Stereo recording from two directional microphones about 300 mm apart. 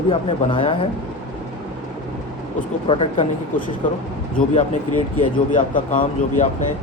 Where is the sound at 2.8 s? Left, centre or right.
Centre.